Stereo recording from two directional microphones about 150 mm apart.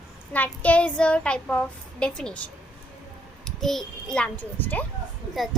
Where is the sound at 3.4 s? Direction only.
Centre (ahead or behind).